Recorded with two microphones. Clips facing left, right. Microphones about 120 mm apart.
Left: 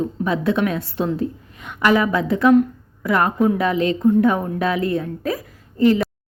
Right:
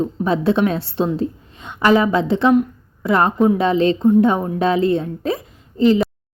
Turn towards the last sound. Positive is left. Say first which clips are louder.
# right 1 dB
turn(degrees=-20)  # may be behind; listen again after turning